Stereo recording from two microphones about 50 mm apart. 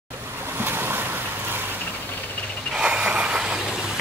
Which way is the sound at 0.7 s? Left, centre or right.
Right.